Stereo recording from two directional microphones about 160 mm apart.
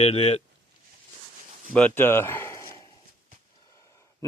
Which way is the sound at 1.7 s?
10° left (ahead or behind).